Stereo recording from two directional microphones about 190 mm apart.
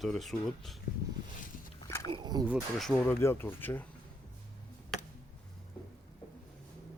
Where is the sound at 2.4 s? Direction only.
5° right (ahead or behind).